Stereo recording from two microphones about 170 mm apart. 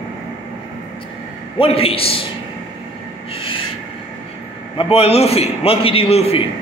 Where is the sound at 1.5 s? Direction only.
35° left (ahead or behind).